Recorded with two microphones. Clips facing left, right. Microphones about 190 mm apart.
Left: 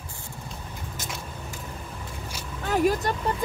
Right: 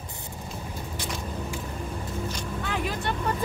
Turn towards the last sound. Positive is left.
turn(degrees=45)  # may be behind; listen again after turning